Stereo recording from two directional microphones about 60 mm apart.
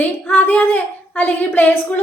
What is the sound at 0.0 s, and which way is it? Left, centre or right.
A woman's voice, left.